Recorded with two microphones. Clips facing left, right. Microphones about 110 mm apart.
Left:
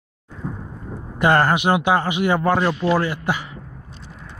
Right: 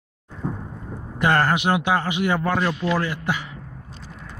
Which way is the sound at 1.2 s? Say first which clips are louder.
Left 3 dB; 10° left (ahead or behind).